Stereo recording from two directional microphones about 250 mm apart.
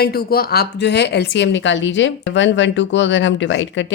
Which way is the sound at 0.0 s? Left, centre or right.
Left.